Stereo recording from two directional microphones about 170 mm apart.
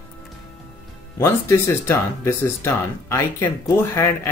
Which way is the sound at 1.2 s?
15° left (ahead or behind).